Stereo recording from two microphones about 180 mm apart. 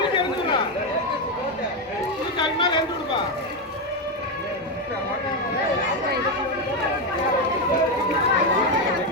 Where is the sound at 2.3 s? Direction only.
25° left (ahead or behind).